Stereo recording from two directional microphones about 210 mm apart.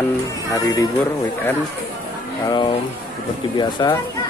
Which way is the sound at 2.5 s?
20° left (ahead or behind).